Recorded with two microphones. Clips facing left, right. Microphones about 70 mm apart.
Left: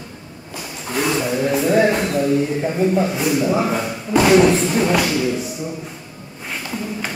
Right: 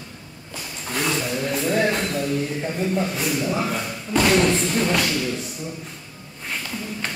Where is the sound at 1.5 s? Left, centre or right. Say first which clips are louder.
Left 6 dB; centre.